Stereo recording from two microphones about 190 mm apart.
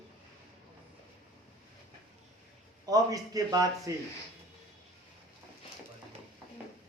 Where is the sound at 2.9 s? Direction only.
20° right (ahead or behind).